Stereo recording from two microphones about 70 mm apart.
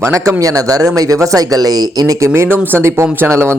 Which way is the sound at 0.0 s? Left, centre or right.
Right.